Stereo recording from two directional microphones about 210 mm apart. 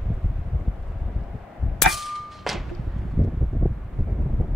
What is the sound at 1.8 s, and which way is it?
Clang, centre (ahead or behind).